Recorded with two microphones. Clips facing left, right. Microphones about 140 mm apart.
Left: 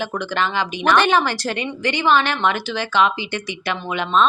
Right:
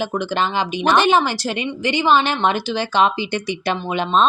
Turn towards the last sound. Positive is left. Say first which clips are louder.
# right 1 dB
turn(degrees=-30)  # may be behind; listen again after turning